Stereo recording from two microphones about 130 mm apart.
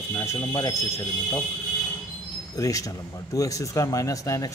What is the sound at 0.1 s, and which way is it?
Speech, 20° left (ahead or behind).